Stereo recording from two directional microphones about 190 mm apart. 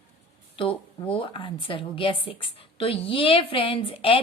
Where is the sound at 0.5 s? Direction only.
25° left (ahead or behind).